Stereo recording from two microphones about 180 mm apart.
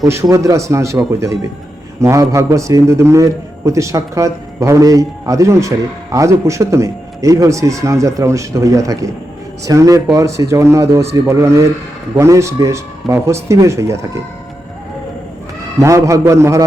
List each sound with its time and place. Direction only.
0.0 s a man's voice: 15° right (ahead or behind)
15.8 s a man's voice: 15° right (ahead or behind)